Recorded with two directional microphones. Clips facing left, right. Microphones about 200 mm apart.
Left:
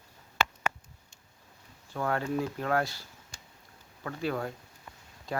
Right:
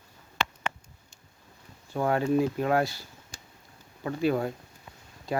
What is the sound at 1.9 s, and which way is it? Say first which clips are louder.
Speech: right 6 dB; 15° right (ahead or behind).